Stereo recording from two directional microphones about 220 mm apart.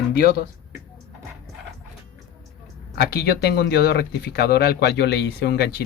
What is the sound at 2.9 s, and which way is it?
Speech, 45° left (ahead or behind).